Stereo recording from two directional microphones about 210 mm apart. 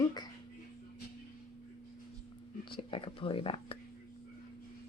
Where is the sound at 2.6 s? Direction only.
25° left (ahead or behind).